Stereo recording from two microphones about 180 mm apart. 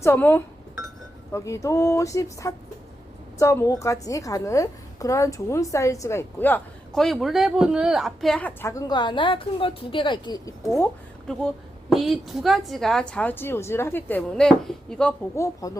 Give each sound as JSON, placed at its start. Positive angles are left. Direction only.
{"t": 0.0, "sound": "a woman's voice", "side_deg": 15}
{"t": 11.3, "sound": "a woman's voice", "side_deg": 5}
{"t": 15.4, "sound": "speech", "side_deg": 20}